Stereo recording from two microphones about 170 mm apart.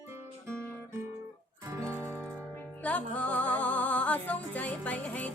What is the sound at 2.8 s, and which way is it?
Music, 10° left (ahead or behind).